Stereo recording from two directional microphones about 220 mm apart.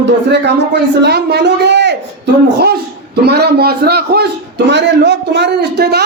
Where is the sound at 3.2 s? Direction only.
45° right (ahead or behind).